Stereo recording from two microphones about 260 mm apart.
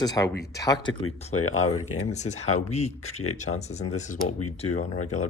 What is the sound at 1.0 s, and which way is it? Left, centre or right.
Speech, left.